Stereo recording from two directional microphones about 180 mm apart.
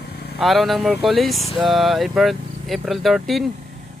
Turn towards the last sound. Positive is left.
turn(degrees=0)  # may be behind; listen again after turning